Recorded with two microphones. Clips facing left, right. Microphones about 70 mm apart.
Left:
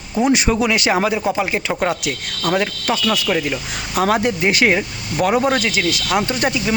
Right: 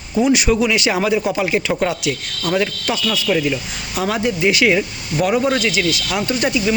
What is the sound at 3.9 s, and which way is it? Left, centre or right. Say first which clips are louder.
Speech: left 3 dB; left.